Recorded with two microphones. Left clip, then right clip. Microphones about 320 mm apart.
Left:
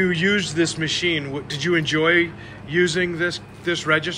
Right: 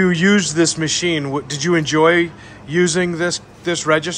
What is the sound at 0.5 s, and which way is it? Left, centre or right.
Speech, right.